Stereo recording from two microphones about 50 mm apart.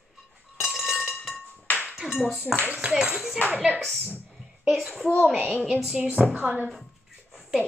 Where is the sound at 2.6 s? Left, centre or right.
Right.